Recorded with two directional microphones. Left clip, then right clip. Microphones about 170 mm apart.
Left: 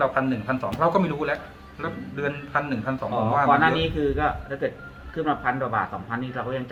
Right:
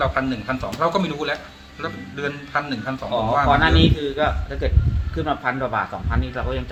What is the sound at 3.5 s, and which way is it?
Speech, 55° right (ahead or behind).